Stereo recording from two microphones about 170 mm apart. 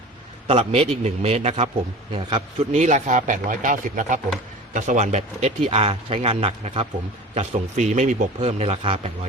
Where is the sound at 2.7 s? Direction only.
45° right (ahead or behind).